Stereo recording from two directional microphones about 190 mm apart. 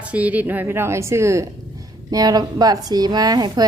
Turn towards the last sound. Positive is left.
turn(degrees=-20)  # may be behind; listen again after turning